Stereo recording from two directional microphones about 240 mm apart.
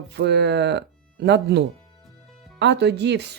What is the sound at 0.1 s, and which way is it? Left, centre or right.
Speech, right.